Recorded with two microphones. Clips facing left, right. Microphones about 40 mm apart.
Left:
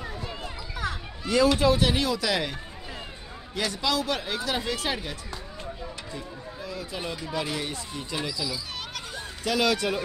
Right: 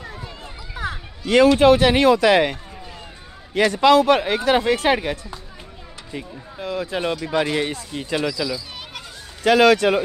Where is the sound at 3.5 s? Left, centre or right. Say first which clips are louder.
Right 13 dB; right.